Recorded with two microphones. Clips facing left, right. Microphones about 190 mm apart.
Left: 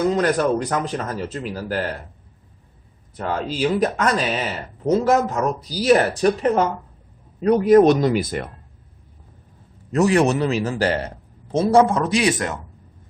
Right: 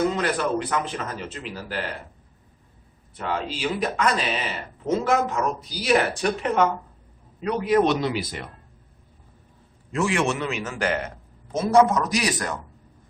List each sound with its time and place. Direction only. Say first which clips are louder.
0.1 s a man's voice: left 5 dB; 40° left (ahead or behind)
3.2 s a man's voice: left 5 dB; 40° left (ahead or behind)
9.9 s a man's voice: left 7 dB; 40° left (ahead or behind); by 12.5 s 25° left (ahead or behind)